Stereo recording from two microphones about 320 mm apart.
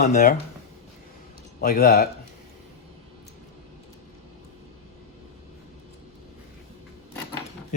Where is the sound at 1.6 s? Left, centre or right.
Left.